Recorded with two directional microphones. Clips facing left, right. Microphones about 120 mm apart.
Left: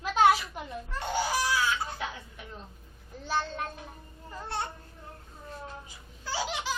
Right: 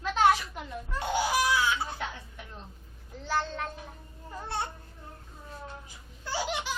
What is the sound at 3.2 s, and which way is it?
Child singing, 15° left (ahead or behind).